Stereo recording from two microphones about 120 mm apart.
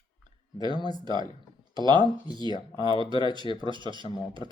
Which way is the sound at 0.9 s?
40° right (ahead or behind).